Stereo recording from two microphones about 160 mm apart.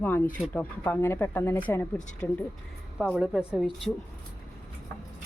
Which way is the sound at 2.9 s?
5° right (ahead or behind).